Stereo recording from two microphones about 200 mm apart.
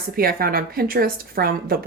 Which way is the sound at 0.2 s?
50° right (ahead or behind).